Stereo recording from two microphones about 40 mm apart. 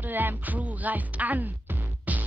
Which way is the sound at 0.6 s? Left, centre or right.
Right.